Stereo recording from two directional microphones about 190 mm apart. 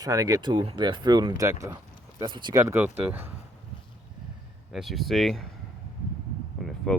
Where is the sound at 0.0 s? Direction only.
20° right (ahead or behind).